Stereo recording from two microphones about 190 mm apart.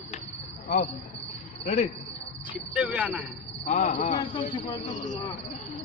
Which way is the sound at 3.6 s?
40° left (ahead or behind).